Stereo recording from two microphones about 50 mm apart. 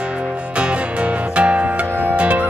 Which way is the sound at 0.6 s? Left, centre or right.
Right.